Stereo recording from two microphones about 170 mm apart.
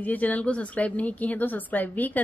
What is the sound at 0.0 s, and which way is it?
Speech, 10° left (ahead or behind).